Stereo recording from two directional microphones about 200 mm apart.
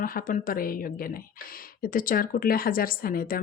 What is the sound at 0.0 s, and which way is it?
A woman's voice, 45° left (ahead or behind).